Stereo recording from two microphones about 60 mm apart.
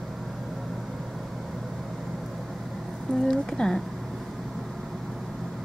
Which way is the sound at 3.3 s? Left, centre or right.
Centre.